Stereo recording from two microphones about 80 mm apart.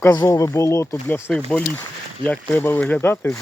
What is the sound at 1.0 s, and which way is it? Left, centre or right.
Speech, left.